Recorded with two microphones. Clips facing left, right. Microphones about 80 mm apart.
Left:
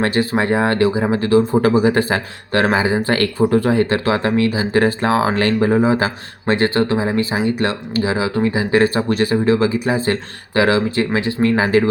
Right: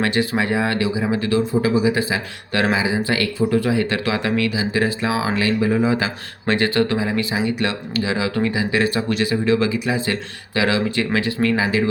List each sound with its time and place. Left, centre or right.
0.0 s speech: left
2.5 s speech: left